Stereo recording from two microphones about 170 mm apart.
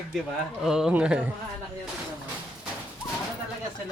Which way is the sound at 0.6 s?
5° right (ahead or behind).